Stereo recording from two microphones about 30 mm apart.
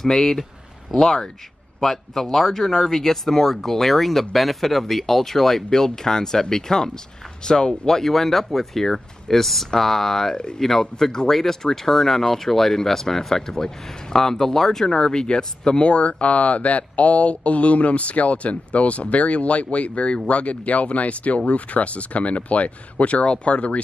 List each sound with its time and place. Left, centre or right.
0.0 s speech: centre
8.0 s speech: centre
10.3 s speech: left
10.6 s speech: centre
15.0 s speech: left